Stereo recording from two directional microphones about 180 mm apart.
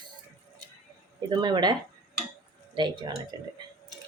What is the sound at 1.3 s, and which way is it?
Speech, 25° right (ahead or behind).